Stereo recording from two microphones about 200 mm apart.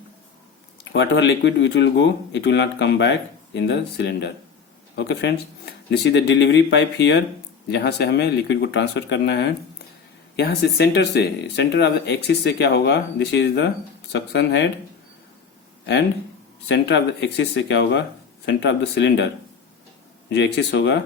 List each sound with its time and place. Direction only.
0.9 s speech: 65° left (ahead or behind)
16.6 s speech: 60° left (ahead or behind)
20.3 s speech: 60° left (ahead or behind)